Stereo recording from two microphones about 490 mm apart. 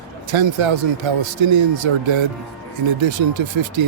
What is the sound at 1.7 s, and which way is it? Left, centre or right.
Speech, right.